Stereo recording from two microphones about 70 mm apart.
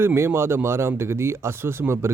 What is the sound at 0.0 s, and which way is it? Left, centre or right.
Speech, right.